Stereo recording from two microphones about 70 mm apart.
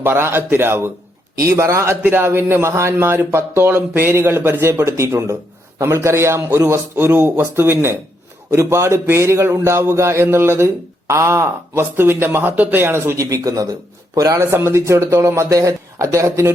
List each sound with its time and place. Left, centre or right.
0.0 s speech: right
13.1 s speech: right
14.5 s speech: right